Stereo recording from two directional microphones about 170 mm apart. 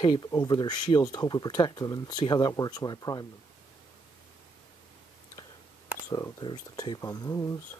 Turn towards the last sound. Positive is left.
turn(degrees=20)  # may be behind; listen again after turning